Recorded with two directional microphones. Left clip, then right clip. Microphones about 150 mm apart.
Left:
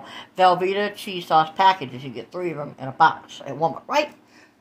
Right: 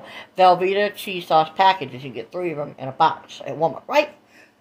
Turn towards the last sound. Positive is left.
turn(degrees=-15)  # may be behind; listen again after turning